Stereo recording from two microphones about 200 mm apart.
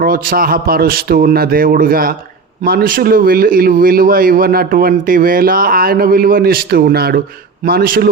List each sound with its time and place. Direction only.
0.0 s a man's voice: 45° right (ahead or behind)